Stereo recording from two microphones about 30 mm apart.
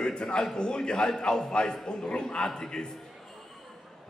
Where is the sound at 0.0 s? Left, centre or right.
Left.